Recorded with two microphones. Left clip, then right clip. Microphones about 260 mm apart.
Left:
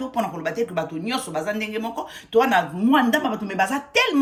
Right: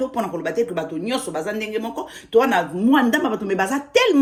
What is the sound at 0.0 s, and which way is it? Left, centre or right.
Speech, left.